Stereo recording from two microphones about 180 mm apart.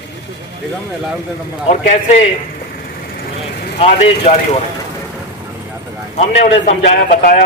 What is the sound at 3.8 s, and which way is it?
Speech, 35° left (ahead or behind).